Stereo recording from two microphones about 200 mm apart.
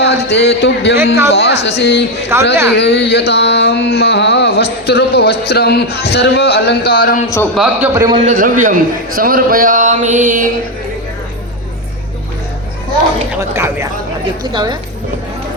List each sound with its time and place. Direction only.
0.1 s a sound: 55° left (ahead or behind)
0.9 s a man's voice: 15° right (ahead or behind)
1.3 s a sound: 60° left (ahead or behind)
7.5 s a man's voice: 5° right (ahead or behind)
7.9 s speech: 20° right (ahead or behind)
8.2 s a man's voice: 40° right (ahead or behind)
13.5 s a man's voice: 15° right (ahead or behind)